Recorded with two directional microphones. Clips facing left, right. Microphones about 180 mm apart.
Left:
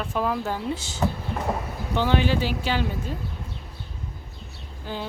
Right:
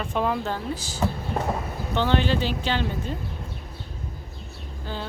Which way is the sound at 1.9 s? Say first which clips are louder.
Even; 10° left (ahead or behind).